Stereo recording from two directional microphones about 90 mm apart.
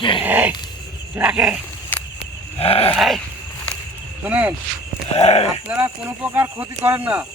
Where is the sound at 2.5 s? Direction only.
90° left.